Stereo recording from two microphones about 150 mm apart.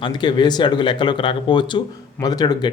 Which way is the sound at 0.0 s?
30° left (ahead or behind).